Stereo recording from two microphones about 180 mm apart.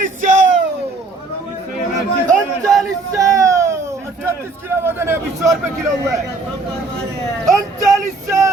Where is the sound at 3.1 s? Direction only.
15° right (ahead or behind).